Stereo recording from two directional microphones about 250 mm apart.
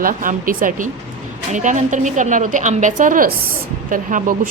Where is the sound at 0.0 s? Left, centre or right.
Right.